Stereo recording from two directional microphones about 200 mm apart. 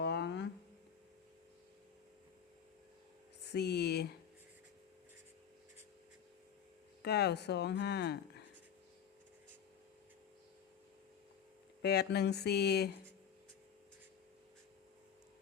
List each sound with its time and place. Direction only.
0.0 s a sound: 55° left (ahead or behind)
3.5 s speech: 55° left (ahead or behind)
7.0 s speech: 55° left (ahead or behind)
11.8 s speech: 55° left (ahead or behind)